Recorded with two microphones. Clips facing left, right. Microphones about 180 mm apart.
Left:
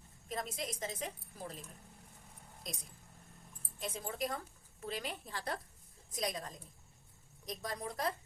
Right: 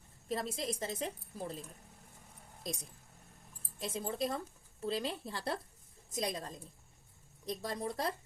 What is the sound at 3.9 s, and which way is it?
A woman's voice, 30° right (ahead or behind).